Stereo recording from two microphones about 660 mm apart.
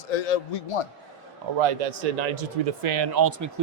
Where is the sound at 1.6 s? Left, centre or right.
Right.